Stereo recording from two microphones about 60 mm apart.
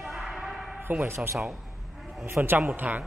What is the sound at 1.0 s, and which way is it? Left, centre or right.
A man's voice, right.